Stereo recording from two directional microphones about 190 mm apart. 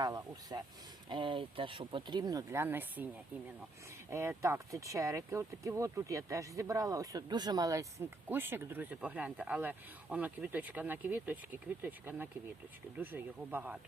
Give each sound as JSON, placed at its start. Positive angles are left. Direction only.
{"t": 0.0, "sound": "speech", "side_deg": -20}
{"t": 4.1, "sound": "speech", "side_deg": -15}